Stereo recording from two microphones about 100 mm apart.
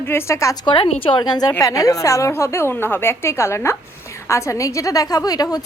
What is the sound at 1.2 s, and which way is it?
A woman's voice, 40° left (ahead or behind).